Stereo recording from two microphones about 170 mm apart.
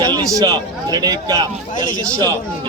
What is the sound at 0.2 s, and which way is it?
Speech, 20° right (ahead or behind).